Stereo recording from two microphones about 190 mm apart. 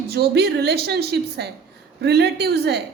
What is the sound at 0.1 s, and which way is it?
A woman's voice, 60° right (ahead or behind).